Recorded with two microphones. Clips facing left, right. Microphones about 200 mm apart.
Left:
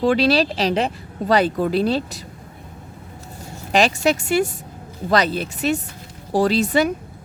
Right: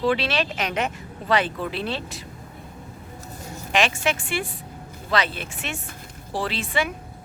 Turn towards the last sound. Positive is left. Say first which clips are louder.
# left 9 dB
turn(degrees=40)  # may be behind; listen again after turning